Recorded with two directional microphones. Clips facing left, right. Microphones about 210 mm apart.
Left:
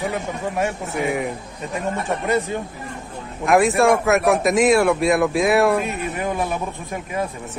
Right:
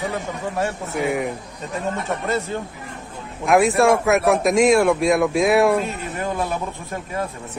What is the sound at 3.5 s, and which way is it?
Speech, centre (ahead or behind).